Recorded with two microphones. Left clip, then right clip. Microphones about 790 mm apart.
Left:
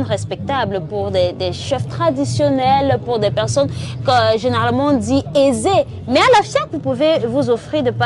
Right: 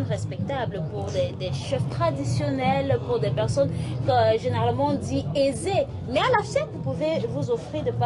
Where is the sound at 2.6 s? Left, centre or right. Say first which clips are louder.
Left 6 dB; left.